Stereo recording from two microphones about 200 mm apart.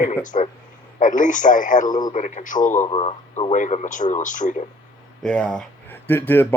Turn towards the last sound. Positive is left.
turn(degrees=10)  # may be behind; listen again after turning